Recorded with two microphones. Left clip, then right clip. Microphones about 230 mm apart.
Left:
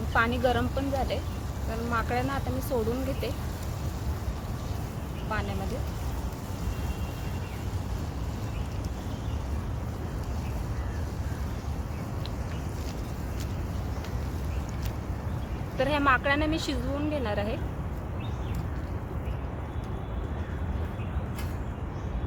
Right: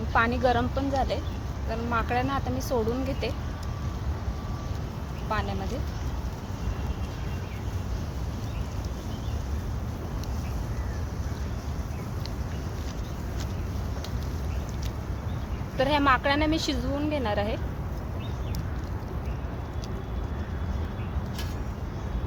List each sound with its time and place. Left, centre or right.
0.1 s a woman's voice: right
15.8 s a woman's voice: right